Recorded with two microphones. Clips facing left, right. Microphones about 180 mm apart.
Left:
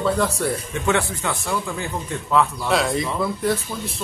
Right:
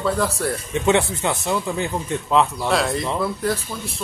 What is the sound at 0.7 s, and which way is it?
Speech, 20° right (ahead or behind).